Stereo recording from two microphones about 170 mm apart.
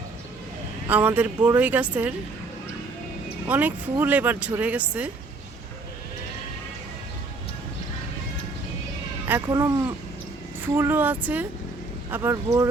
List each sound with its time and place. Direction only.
0.9 s speech: 10° right (ahead or behind)
3.4 s speech: 10° right (ahead or behind)
9.5 s speech: 20° right (ahead or behind)